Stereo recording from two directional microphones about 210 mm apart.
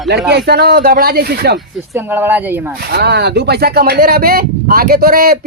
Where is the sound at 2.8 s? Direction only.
50° right (ahead or behind).